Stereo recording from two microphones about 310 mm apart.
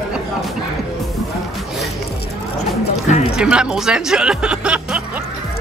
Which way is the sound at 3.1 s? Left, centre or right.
Left.